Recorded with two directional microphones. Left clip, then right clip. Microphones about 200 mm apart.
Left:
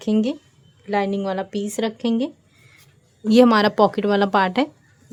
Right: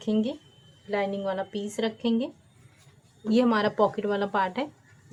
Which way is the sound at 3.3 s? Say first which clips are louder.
Left 9 dB; 55° left (ahead or behind).